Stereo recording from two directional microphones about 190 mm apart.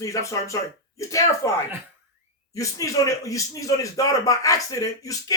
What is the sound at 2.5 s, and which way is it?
Speech, 15° left (ahead or behind).